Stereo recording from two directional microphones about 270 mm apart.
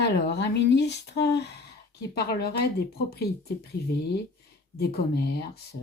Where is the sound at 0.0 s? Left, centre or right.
Left.